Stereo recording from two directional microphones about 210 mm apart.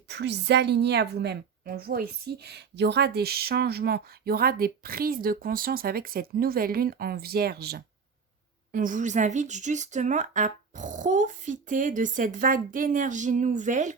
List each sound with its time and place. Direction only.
0.1 s a woman's voice: 55° right (ahead or behind); by 13.9 s 35° right (ahead or behind)